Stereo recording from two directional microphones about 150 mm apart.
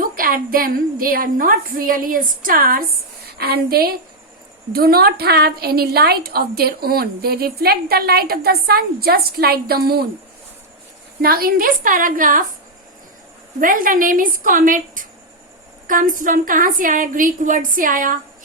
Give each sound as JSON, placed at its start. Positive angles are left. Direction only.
{"t": 0.0, "sound": "a woman's voice", "side_deg": -70}
{"t": 11.2, "sound": "a woman's voice", "side_deg": -80}
{"t": 13.6, "sound": "a woman's voice", "side_deg": -65}